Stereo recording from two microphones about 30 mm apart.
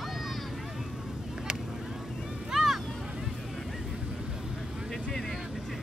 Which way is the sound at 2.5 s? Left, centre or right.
Centre.